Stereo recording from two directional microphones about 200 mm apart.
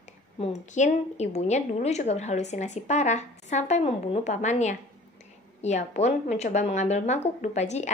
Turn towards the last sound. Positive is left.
turn(degrees=35)  # may be behind; listen again after turning